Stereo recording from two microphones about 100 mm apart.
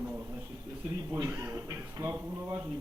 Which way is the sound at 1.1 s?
20° right (ahead or behind).